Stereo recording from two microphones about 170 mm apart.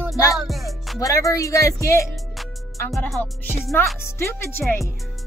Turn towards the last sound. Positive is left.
turn(degrees=10)  # may be behind; listen again after turning